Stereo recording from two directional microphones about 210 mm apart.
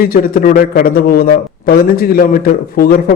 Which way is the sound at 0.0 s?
45° left (ahead or behind).